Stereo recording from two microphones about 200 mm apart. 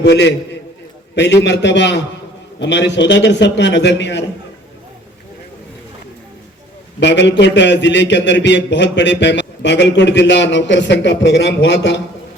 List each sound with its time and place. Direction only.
0.0 s a man's voice: 55° left (ahead or behind)
7.0 s a man's voice: 60° left (ahead or behind)